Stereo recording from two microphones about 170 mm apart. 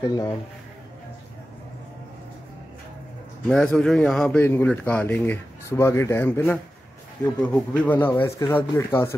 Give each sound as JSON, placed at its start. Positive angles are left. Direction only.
{"t": 0.0, "sound": "speech", "side_deg": 20}
{"t": 3.4, "sound": "speech", "side_deg": 5}